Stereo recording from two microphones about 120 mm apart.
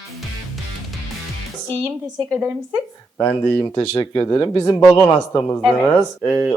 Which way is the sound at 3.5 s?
20° left (ahead or behind).